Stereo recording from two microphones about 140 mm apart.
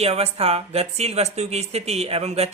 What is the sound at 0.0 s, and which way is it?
Speech, 45° right (ahead or behind).